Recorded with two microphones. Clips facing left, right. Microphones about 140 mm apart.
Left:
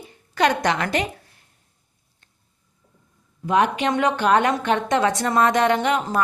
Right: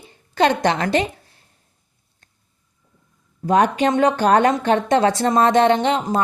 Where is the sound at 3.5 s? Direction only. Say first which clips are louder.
Right 3 dB; 40° right (ahead or behind).